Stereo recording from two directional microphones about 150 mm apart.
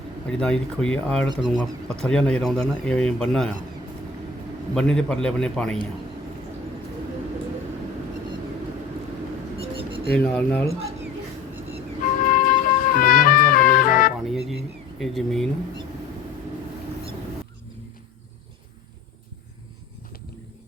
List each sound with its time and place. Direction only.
0.3 s speech: 5° left (ahead or behind)
4.7 s speech: 5° left (ahead or behind)
9.6 s a sound: 35° right (ahead or behind)
10.2 s speech: 10° left (ahead or behind)
12.2 s music: 65° left (ahead or behind)
14.2 s a sound: centre (ahead or behind)